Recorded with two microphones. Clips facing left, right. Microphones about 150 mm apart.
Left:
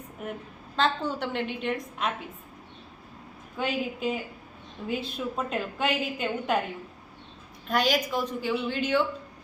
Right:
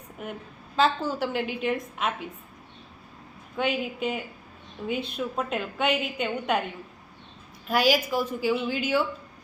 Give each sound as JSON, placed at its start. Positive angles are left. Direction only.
{"t": 0.8, "sound": "a woman's voice", "side_deg": -5}
{"t": 3.6, "sound": "a woman's voice", "side_deg": 0}
{"t": 7.7, "sound": "a woman's voice", "side_deg": -5}